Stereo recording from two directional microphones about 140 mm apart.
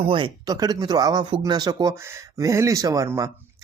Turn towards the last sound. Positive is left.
turn(degrees=-20)  # may be behind; listen again after turning